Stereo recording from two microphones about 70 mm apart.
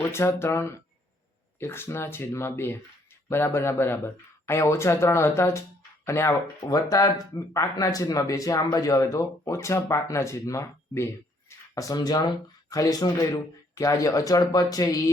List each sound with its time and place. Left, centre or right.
0.0 s speech: left
6.7 s speech: left
11.7 s speech: left
11.9 s speech: left
12.7 s speech: left